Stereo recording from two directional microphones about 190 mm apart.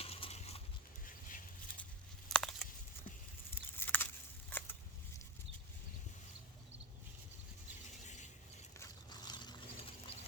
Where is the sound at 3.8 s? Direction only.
10° left (ahead or behind).